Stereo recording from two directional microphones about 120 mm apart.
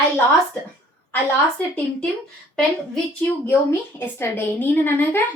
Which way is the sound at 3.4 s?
20° left (ahead or behind).